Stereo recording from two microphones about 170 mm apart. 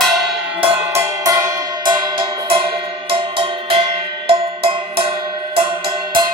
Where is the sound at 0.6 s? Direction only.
20° right (ahead or behind).